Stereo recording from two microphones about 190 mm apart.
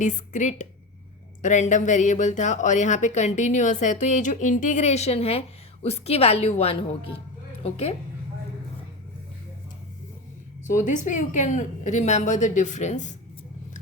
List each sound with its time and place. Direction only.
0.0 s speech: 40° left (ahead or behind)
10.7 s speech: 40° left (ahead or behind)